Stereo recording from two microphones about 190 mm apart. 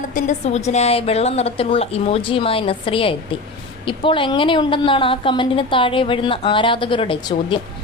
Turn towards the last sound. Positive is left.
turn(degrees=25)  # may be behind; listen again after turning